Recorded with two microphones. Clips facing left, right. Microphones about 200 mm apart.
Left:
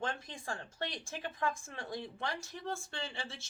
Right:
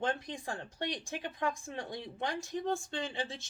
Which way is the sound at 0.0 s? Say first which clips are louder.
Right 5 dB; 20° right (ahead or behind).